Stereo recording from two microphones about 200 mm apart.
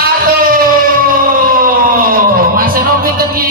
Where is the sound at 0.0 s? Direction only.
45° right (ahead or behind).